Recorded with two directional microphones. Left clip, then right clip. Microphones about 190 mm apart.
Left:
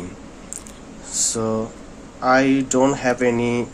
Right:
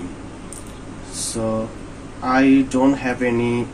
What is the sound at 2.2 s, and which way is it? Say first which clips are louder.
Speech: even; 65° left (ahead or behind).